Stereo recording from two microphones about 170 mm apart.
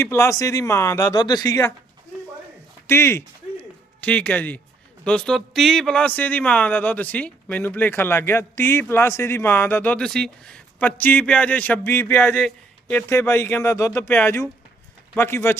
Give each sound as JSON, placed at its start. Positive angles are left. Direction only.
{"t": 0.0, "sound": "speech", "side_deg": 15}
{"t": 2.8, "sound": "a sound", "side_deg": 15}
{"t": 5.0, "sound": "speech", "side_deg": 5}